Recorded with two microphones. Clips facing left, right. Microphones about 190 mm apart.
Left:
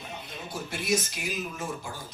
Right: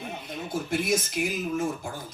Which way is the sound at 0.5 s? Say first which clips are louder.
Right 3 dB; 50° right (ahead or behind).